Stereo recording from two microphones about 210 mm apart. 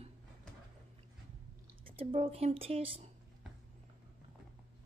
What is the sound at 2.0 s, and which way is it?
A woman's voice, 25° right (ahead or behind).